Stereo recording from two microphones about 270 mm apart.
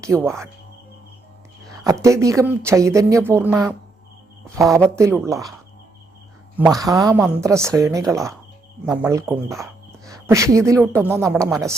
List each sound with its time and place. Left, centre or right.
0.2 s speech: centre
1.7 s speech: centre
6.7 s speech: centre